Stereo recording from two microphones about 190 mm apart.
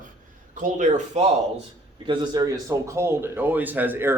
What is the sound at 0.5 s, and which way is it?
Speech, 40° right (ahead or behind).